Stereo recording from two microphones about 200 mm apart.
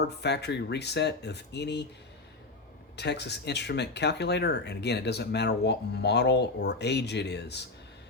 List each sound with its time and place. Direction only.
0.0 s speech: 55° left (ahead or behind)
2.9 s speech: 55° left (ahead or behind)